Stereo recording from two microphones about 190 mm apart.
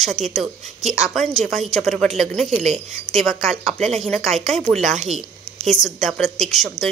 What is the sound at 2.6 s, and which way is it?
Speech, 35° right (ahead or behind).